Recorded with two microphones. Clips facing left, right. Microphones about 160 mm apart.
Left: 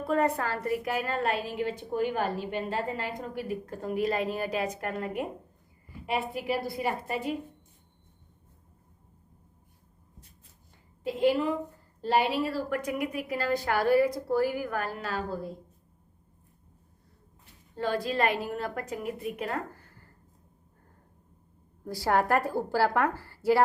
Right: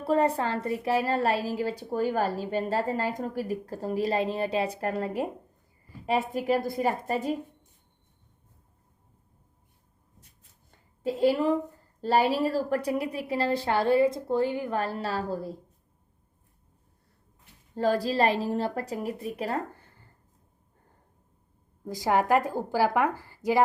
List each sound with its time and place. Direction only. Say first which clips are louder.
0.0 s a woman's voice: right 2 dB; 30° right (ahead or behind)
11.0 s a woman's voice: right 2 dB; 40° right (ahead or behind)
17.7 s a woman's voice: right 4 dB; 40° right (ahead or behind)
21.8 s speech: right 2 dB; 15° right (ahead or behind)